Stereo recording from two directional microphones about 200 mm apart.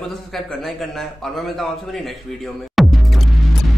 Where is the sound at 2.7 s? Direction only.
Centre (ahead or behind).